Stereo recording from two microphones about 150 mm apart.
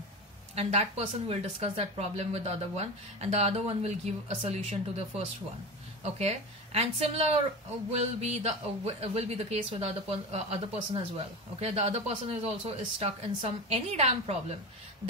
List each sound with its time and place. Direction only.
0.6 s a woman's voice: 45° right (ahead or behind)